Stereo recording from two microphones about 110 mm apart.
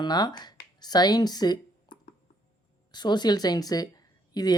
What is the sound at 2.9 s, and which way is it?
Speech, 40° left (ahead or behind).